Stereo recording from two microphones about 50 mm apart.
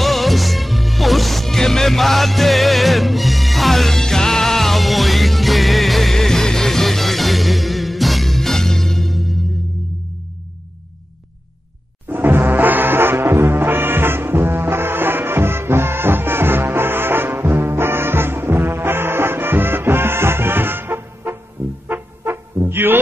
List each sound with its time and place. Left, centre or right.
0.0 s music: centre
12.1 s foghorn: right
21.8 s music: right